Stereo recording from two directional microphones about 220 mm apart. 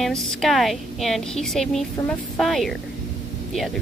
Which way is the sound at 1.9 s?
15° left (ahead or behind).